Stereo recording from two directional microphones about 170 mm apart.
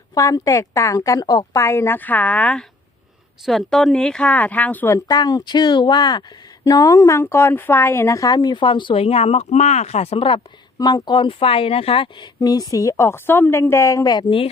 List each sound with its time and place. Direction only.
0.1 s a woman's voice: 20° left (ahead or behind)
5.0 s a woman's voice: 25° left (ahead or behind)
12.4 s a woman's voice: 20° left (ahead or behind)